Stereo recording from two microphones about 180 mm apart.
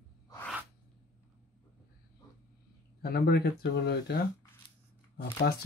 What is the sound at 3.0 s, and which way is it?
Speech, 60° left (ahead or behind).